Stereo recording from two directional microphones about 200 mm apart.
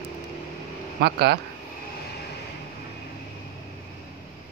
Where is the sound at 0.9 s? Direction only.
55° right (ahead or behind).